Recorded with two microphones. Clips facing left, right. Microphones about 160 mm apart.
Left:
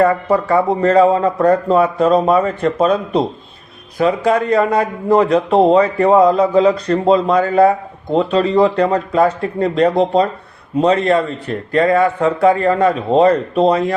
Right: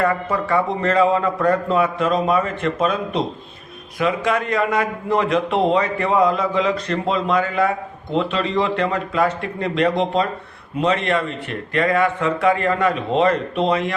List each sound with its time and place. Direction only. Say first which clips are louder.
0.0 s a man's voice: left 7 dB; 35° left (ahead or behind)